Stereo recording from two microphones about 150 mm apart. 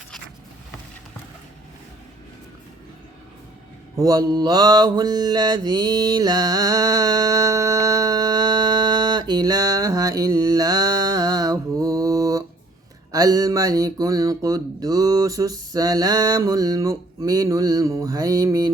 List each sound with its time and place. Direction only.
3.9 s mantra: 25° right (ahead or behind)
13.1 s speech: 25° right (ahead or behind)